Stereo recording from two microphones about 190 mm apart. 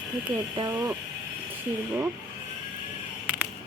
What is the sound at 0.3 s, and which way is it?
Speech, 25° right (ahead or behind).